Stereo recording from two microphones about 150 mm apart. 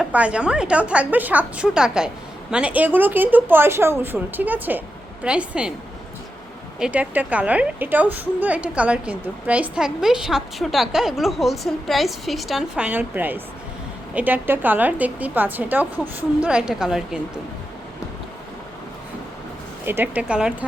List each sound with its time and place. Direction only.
0.0 s a woman's voice: 10° right (ahead or behind)
6.7 s a woman's voice: 5° right (ahead or behind)
19.8 s a woman's voice: 15° right (ahead or behind)